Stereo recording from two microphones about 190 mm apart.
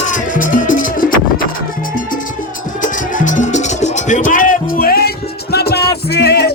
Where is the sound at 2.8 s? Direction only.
40° left (ahead or behind).